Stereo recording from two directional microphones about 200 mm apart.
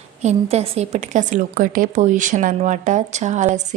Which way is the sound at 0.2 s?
35° right (ahead or behind).